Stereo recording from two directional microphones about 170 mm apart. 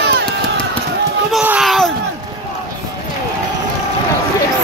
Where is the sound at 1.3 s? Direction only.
5° right (ahead or behind).